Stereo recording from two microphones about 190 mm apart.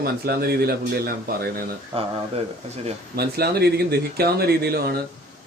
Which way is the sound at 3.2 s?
55° right (ahead or behind).